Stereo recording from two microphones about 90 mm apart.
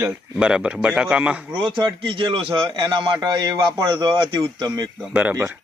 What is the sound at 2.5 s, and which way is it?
A man's voice, 55° right (ahead or behind).